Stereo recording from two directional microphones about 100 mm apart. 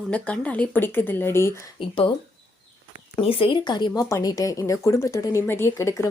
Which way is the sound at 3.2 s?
70° left (ahead or behind).